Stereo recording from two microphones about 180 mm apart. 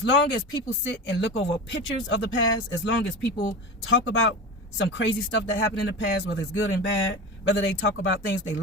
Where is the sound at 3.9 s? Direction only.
90° left.